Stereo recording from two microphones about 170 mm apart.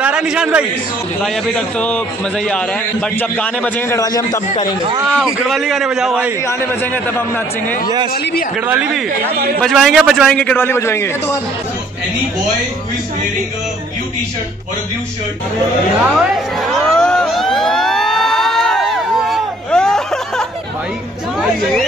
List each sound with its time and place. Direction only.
0.0 s a man's voice: 5° right (ahead or behind)
1.2 s a man's voice: 5° left (ahead or behind)
4.0 s a man's voice: 20° left (ahead or behind)
5.1 s a man's voice: centre (ahead or behind)
6.4 s a man's voice: 15° left (ahead or behind)
8.6 s speech: 10° right (ahead or behind)
9.6 s a man's voice: centre (ahead or behind)
16.0 s a sound: centre (ahead or behind)